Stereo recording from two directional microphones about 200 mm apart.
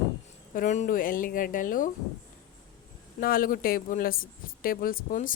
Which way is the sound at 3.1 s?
45° left (ahead or behind).